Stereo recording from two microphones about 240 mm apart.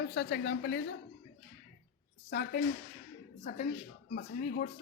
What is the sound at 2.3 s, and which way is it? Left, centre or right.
Speech, left.